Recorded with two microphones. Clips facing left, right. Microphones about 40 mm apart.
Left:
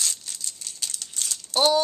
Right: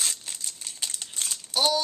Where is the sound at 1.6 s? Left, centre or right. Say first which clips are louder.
Left 4 dB; centre.